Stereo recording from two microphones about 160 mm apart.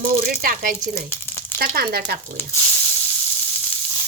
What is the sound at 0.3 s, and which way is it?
Speech, 65° right (ahead or behind).